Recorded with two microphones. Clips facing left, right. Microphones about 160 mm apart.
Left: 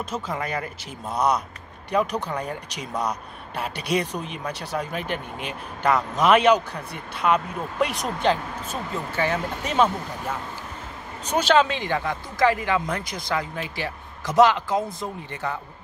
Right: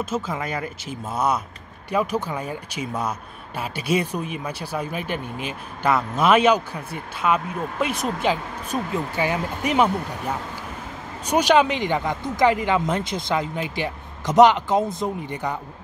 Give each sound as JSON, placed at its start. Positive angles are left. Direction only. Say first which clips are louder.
{"t": 0.0, "sound": "speech", "louder": "right 3 dB", "side_deg": -5}
{"t": 11.2, "sound": "speech", "louder": "right 2 dB", "side_deg": -15}